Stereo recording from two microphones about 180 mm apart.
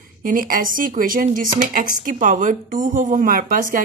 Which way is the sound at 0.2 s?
50° right (ahead or behind).